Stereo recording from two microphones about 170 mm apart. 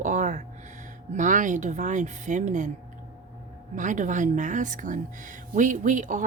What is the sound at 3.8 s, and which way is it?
Speech, 45° right (ahead or behind).